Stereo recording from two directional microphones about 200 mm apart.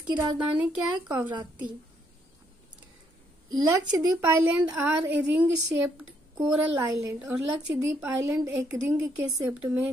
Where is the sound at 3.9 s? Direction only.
15° right (ahead or behind).